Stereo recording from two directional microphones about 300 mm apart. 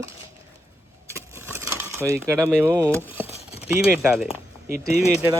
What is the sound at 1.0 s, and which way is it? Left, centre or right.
Coin, centre.